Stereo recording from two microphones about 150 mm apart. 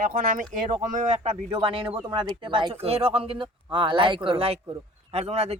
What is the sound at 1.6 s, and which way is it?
A man's voice, 35° right (ahead or behind).